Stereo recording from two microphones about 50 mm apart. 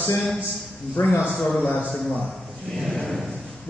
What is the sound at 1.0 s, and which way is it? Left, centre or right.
Speech, left.